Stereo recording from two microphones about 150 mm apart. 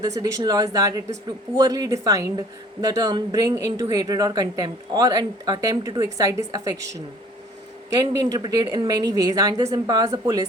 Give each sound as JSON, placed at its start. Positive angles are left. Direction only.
{"t": 0.0, "sound": "speech", "side_deg": -25}
{"t": 7.9, "sound": "speech", "side_deg": -25}